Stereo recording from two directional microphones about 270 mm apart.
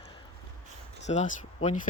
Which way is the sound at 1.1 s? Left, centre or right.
Left.